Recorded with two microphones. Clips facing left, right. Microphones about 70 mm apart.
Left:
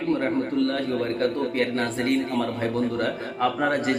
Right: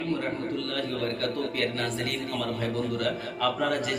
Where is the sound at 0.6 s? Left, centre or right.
Left.